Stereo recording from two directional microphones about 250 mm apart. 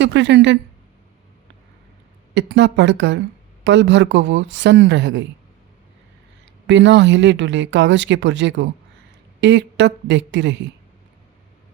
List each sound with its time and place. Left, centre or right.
0.0 s speech: right
2.3 s speech: right
6.7 s speech: right